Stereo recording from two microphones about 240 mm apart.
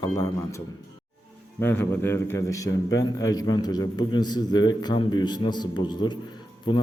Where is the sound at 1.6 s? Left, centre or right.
Centre.